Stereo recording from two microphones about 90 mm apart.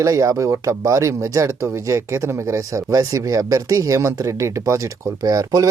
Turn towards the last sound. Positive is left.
turn(degrees=-40)  # may be behind; listen again after turning